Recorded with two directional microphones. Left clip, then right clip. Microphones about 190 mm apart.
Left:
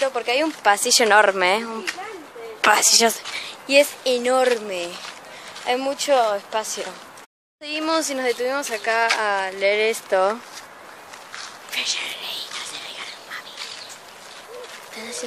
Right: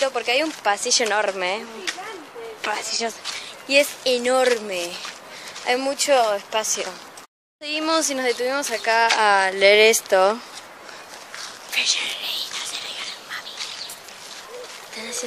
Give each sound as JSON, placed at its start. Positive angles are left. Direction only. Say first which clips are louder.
{"t": 0.0, "sound": "speech", "louder": "even", "side_deg": 5}
{"t": 0.7, "sound": "a woman's voice", "louder": "left 6 dB", "side_deg": 45}
{"t": 3.3, "sound": "a sound", "louder": "left 2 dB", "side_deg": 35}
{"t": 4.0, "sound": "speech", "louder": "even", "side_deg": 10}
{"t": 9.2, "sound": "a sound", "louder": "right 5 dB", "side_deg": -45}
{"t": 10.0, "sound": "speech", "louder": "right 2 dB", "side_deg": -10}
{"t": 11.3, "sound": "whispering", "louder": "right 3 dB", "side_deg": 0}
{"t": 15.0, "sound": "speech", "louder": "right 2 dB", "side_deg": 0}